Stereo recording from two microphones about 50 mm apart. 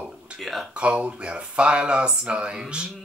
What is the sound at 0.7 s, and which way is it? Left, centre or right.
Speech, right.